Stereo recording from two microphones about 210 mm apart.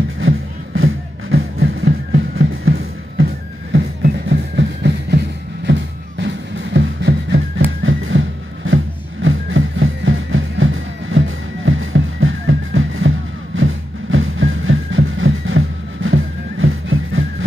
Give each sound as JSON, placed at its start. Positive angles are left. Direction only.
{"t": 0.7, "sound": "music", "side_deg": -70}
{"t": 3.7, "sound": "music", "side_deg": -60}
{"t": 13.6, "sound": "a sound", "side_deg": -70}